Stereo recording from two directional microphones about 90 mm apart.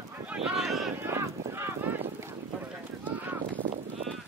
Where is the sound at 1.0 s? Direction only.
30° right (ahead or behind).